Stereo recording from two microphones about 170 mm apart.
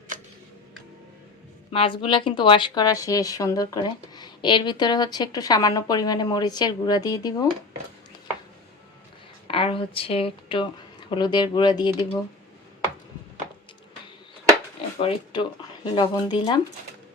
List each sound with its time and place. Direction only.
1.7 s speech: 30° left (ahead or behind)
9.5 s a woman's voice: 30° left (ahead or behind)
14.9 s speech: 30° left (ahead or behind)